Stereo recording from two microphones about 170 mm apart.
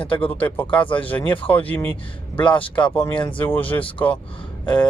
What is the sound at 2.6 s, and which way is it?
Speech, 30° left (ahead or behind).